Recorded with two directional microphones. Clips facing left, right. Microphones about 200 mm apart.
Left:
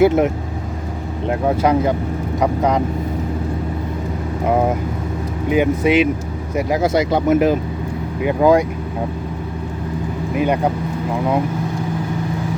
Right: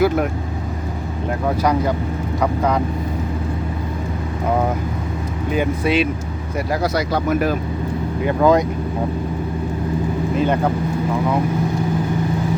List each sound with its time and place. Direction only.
0.0 s speech: 25° left (ahead or behind)
1.3 s speech: 25° left (ahead or behind)
5.5 s speech: 15° left (ahead or behind)
10.3 s speech: 15° left (ahead or behind)